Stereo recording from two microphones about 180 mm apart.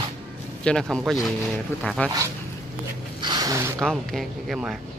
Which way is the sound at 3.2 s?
20° right (ahead or behind).